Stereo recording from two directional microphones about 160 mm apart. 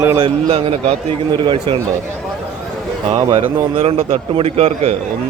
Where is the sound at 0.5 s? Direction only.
35° right (ahead or behind).